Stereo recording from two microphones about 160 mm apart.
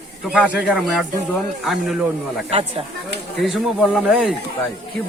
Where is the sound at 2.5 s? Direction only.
35° right (ahead or behind).